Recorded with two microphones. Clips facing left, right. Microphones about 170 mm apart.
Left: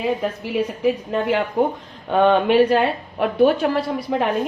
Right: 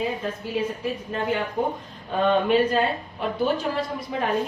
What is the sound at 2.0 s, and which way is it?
A woman's voice, 75° left (ahead or behind).